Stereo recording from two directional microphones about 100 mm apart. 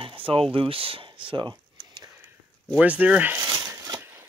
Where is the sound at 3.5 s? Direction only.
45° right (ahead or behind).